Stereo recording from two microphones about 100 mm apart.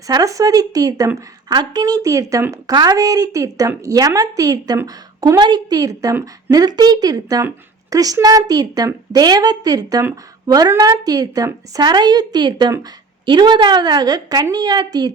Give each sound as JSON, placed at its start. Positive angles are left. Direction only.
{"t": 0.1, "sound": "a woman's voice", "side_deg": -35}
{"t": 11.9, "sound": "a woman's voice", "side_deg": -45}